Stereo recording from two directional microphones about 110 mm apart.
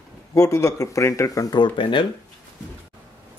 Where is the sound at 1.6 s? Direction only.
50° left (ahead or behind).